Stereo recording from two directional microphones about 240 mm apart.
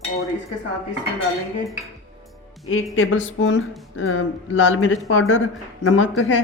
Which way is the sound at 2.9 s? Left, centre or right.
Left.